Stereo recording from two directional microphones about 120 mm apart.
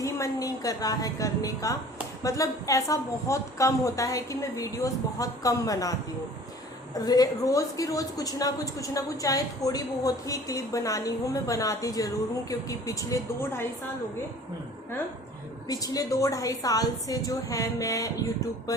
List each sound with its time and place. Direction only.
0.0 s a woman's voice: 30° left (ahead or behind)
7.0 s a woman's voice: 35° left (ahead or behind)
15.7 s a woman's voice: 30° left (ahead or behind)